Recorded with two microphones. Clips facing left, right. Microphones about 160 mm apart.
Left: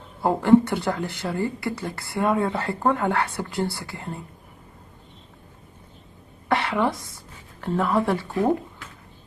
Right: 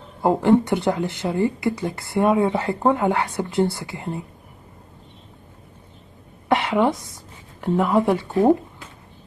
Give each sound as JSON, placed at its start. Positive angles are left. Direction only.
{"t": 0.2, "sound": "speech", "side_deg": -20}
{"t": 6.5, "sound": "a woman's voice", "side_deg": -20}